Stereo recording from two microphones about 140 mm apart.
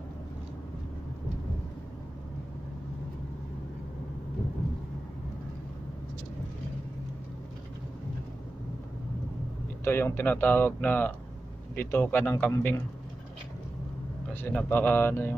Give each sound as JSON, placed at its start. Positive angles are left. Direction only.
{"t": 9.8, "sound": "speech", "side_deg": 15}
{"t": 14.3, "sound": "speech", "side_deg": 15}